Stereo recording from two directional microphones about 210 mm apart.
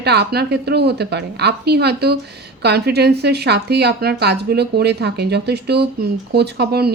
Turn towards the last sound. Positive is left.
turn(degrees=-50)  # may be behind; listen again after turning